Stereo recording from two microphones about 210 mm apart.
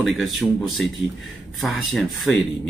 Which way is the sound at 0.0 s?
Centre (ahead or behind).